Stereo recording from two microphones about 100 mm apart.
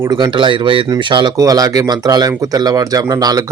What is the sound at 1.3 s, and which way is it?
Speech, 35° right (ahead or behind).